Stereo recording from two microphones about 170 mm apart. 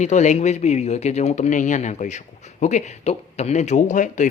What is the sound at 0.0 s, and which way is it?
Speech, 45° left (ahead or behind).